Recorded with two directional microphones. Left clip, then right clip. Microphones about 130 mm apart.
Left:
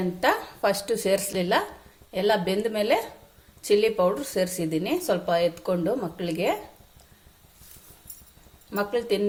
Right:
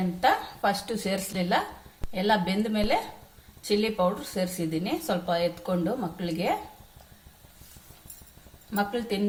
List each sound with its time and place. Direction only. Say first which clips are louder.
0.6 s speech: left 3 dB; 35° left (ahead or behind)
8.7 s speech: left 3 dB; 45° left (ahead or behind)